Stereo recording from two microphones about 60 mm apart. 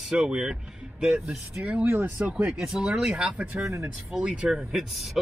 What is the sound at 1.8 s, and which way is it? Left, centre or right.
Speech, right.